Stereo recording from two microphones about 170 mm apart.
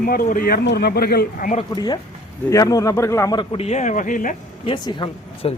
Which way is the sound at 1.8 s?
25° left (ahead or behind).